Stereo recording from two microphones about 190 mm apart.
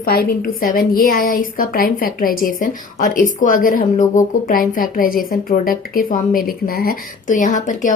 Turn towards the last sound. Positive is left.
turn(degrees=40)  # may be behind; listen again after turning